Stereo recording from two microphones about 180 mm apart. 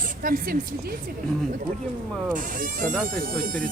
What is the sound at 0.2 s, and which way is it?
Speech, 50° right (ahead or behind).